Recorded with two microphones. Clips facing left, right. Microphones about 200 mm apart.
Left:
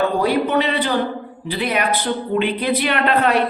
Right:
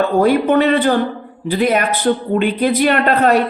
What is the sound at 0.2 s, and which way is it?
Speech, 50° right (ahead or behind).